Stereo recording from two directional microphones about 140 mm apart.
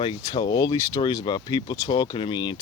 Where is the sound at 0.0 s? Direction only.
30° left (ahead or behind).